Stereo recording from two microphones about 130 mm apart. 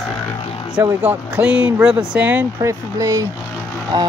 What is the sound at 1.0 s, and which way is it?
Speech, 10° right (ahead or behind).